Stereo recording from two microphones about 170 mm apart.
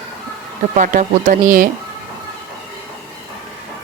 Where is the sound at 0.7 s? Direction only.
50° right (ahead or behind).